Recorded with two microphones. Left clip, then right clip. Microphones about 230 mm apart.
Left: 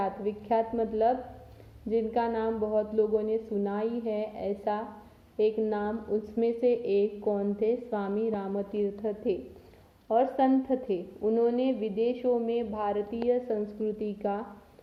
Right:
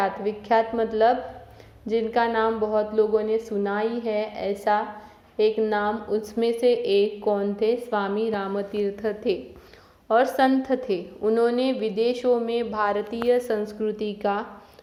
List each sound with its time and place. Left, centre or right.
0.0 s a woman's voice: centre
11.2 s a woman's voice: right
11.4 s a woman's voice: centre